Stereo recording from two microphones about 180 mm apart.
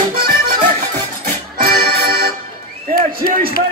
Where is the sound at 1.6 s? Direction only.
60° right (ahead or behind).